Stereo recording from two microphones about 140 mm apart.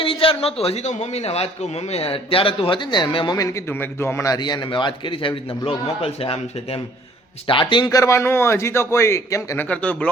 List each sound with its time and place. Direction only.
0.0 s a man's voice: 40° left (ahead or behind)
3.3 s a man's voice: 20° left (ahead or behind)
9.6 s speech: 10° left (ahead or behind)